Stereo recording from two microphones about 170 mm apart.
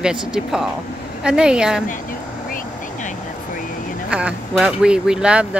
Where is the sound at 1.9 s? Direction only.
55° left (ahead or behind).